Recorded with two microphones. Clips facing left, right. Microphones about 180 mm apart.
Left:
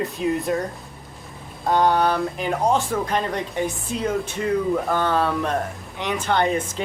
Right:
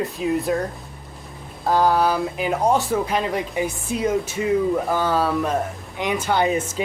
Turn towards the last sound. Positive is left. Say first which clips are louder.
# right 1 dB
turn(degrees=-5)  # may be behind; listen again after turning